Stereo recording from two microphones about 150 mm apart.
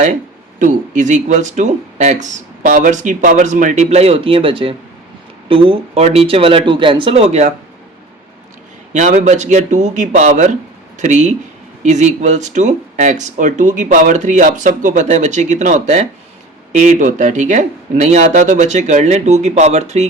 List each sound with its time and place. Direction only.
0.6 s speech: 60° right (ahead or behind)
8.9 s speech: 55° right (ahead or behind)